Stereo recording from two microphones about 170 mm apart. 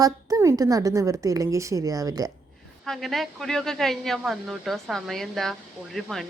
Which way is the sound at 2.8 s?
Centre (ahead or behind).